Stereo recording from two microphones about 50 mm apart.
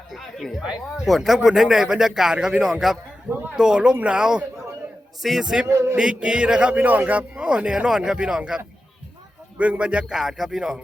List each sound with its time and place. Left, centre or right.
0.1 s music: centre
1.0 s a man's voice: centre
5.2 s a man's voice: centre
5.6 s a sound: right
6.0 s a man's voice: centre
6.7 s a man's voice: right
7.9 s a man's voice: centre
9.6 s a man's voice: right
10.1 s a man's voice: centre